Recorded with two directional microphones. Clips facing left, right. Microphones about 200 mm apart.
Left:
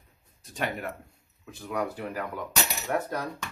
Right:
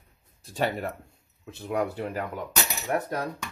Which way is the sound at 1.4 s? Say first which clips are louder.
Right 3 dB; 25° right (ahead or behind).